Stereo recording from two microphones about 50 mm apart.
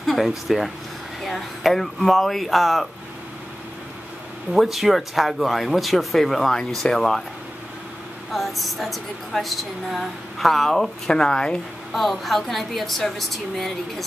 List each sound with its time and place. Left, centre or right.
0.0 s a sound: centre
0.5 s speech: centre
4.5 s speech: centre
8.3 s speech: centre
11.1 s speech: centre
11.9 s speech: centre